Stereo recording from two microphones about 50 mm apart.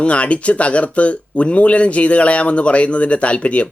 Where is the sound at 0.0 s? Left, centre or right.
Left.